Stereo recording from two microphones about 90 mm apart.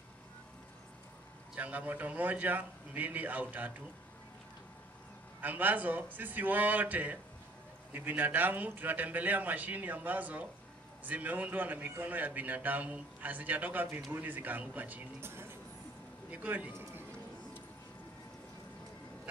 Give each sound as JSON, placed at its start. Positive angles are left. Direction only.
{"t": 1.5, "sound": "a man's voice", "side_deg": -15}
{"t": 5.4, "sound": "a man's voice", "side_deg": -20}